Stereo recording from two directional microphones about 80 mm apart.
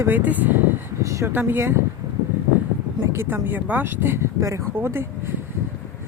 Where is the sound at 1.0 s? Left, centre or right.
Right.